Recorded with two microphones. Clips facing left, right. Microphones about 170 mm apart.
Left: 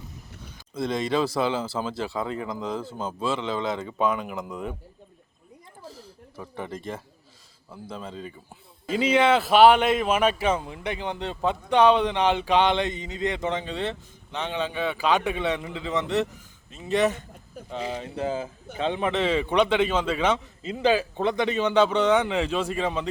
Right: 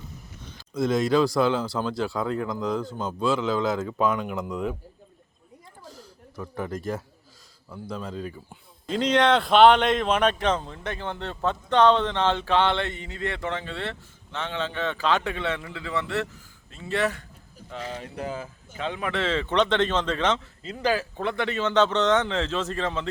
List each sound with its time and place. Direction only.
0.4 s speech: centre (ahead or behind)
5.8 s a sound: centre (ahead or behind)
7.7 s speech: centre (ahead or behind)
18.0 s speech: 25° left (ahead or behind)